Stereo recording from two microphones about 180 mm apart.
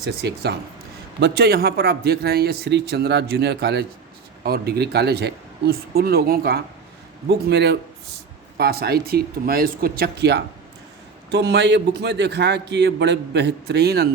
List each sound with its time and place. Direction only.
0.0 s a man's voice: 65° right (ahead or behind)